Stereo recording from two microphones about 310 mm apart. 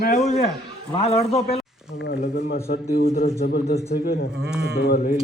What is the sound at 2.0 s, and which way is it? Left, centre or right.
A man's voice, left.